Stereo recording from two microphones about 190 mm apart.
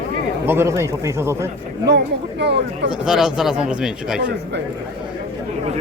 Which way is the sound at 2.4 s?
65° right (ahead or behind).